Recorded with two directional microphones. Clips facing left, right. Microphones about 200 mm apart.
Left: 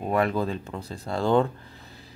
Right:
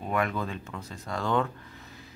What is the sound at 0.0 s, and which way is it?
Speech, 35° left (ahead or behind).